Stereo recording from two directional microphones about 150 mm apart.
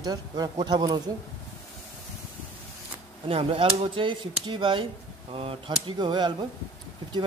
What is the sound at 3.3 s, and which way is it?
Speech, 40° right (ahead or behind).